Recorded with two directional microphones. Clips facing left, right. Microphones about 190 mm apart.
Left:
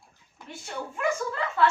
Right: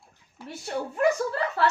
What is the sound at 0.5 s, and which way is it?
Speech, 40° right (ahead or behind).